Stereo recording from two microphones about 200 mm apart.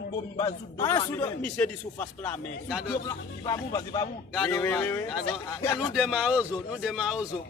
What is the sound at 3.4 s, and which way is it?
Speech, 20° left (ahead or behind).